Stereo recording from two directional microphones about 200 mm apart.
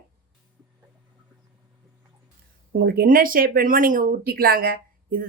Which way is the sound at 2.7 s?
50° right (ahead or behind).